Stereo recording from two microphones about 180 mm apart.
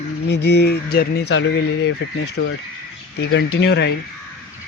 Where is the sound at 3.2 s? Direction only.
80° left; by 4.0 s 65° left (ahead or behind).